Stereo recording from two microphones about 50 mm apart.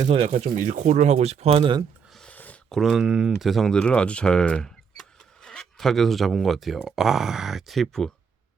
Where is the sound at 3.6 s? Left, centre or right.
Centre.